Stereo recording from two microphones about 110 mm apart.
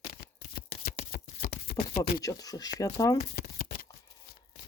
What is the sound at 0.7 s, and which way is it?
Shuffling cards, 90° left.